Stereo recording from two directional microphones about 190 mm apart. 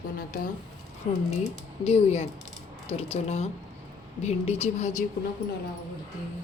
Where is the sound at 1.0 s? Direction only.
40° left (ahead or behind).